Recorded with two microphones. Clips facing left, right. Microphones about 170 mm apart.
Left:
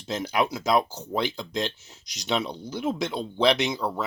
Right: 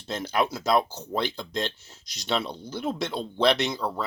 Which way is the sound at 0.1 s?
5° left (ahead or behind).